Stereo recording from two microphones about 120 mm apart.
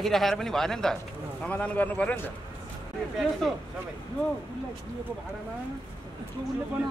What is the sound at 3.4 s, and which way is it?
Speech, 5° left (ahead or behind).